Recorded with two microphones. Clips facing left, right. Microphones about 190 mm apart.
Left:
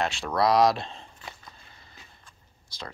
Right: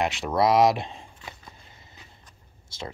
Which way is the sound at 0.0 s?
20° right (ahead or behind).